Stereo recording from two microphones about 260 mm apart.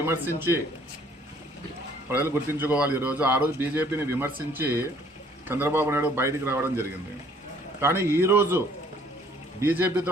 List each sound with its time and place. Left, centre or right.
0.3 s a man's voice: centre
2.0 s a man's voice: centre